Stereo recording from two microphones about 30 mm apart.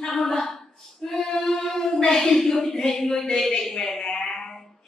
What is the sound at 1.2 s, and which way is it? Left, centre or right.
Female singing, left.